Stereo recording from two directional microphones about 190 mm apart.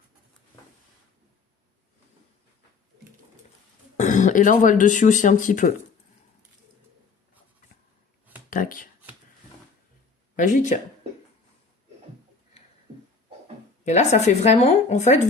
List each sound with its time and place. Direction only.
3.9 s speech: 40° left (ahead or behind)
8.4 s shuffling cards: 45° left (ahead or behind)
10.3 s speech: 40° left (ahead or behind)
13.8 s speech: 35° left (ahead or behind)